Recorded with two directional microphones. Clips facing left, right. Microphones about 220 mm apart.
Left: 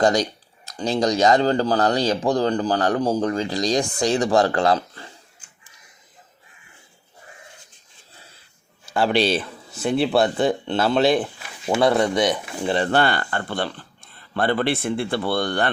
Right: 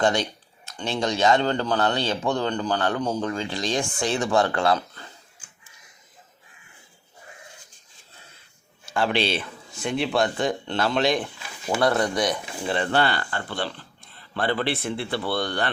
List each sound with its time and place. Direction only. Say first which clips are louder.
0.0 s speech: left 4 dB; 40° left (ahead or behind)
8.9 s speech: left 4 dB; 35° left (ahead or behind)
11.8 s speech: left 4 dB; 25° left (ahead or behind)
12.6 s speech: left 3 dB; 35° left (ahead or behind)